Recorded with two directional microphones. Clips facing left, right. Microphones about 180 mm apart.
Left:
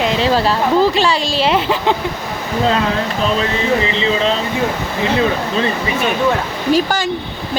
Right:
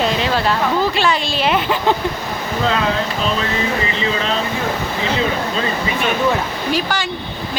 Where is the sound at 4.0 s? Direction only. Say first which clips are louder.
Left 4 dB; 30° left (ahead or behind).